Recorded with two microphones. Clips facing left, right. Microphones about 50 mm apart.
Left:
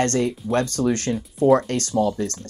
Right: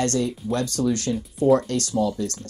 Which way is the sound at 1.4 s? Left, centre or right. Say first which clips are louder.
Left 2 dB; left.